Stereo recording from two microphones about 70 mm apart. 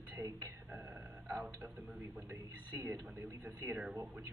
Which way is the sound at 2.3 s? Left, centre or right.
Right.